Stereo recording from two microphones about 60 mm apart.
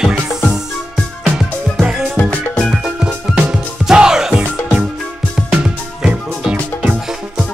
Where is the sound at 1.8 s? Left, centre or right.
Centre.